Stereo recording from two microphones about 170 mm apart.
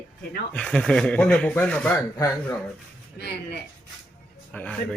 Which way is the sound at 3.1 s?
70° left (ahead or behind).